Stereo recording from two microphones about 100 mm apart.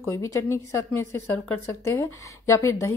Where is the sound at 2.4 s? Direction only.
30° left (ahead or behind).